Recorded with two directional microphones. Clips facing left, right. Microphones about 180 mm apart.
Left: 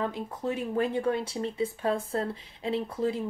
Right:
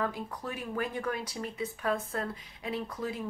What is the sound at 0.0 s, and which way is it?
Speech, 25° left (ahead or behind).